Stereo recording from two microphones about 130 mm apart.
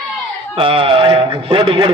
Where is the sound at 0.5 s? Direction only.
45° right (ahead or behind).